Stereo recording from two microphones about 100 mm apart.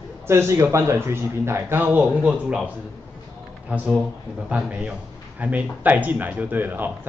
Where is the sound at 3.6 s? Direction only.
10° right (ahead or behind).